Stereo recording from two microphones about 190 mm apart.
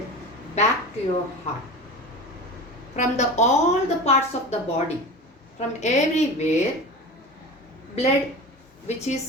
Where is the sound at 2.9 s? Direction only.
40° left (ahead or behind).